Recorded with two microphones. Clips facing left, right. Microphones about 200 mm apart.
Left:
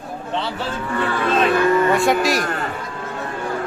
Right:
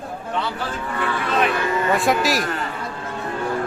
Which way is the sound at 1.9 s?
Centre (ahead or behind).